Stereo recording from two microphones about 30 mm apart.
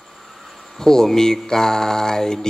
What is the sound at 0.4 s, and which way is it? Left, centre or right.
Mantra, centre.